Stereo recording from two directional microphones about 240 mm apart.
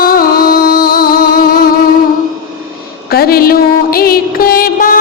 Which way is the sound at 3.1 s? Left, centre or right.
Left.